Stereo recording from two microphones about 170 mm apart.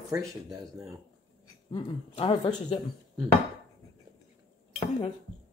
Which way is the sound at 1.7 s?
25° left (ahead or behind).